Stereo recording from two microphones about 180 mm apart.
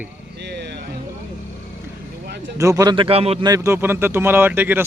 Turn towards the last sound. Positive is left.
turn(degrees=-10)  # may be behind; listen again after turning